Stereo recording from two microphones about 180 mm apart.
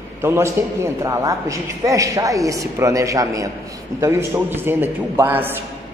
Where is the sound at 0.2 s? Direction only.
15° right (ahead or behind).